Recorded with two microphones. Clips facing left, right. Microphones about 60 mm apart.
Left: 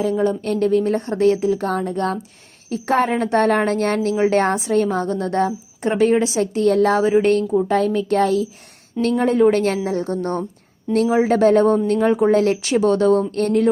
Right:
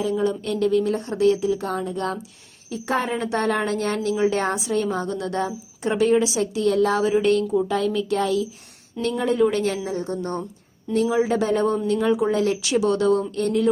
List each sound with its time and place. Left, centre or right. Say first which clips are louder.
0.0 s speech: left 4 dB; left
4.1 s a woman's voice: left 1 dB; left
4.4 s a woman's voice: left 6 dB; left